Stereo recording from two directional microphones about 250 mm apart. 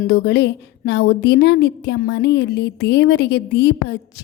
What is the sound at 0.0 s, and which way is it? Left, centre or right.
A woman's voice, left.